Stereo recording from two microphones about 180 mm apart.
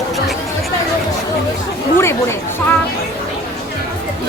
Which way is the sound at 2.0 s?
15° left (ahead or behind).